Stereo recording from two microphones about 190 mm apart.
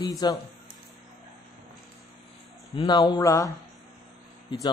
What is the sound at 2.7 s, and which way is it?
Speech, 25° left (ahead or behind).